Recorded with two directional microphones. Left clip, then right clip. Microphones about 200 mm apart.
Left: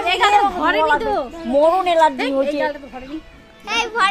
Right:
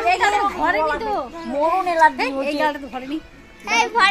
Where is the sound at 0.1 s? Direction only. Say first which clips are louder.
Left 5 dB; 30° left (ahead or behind).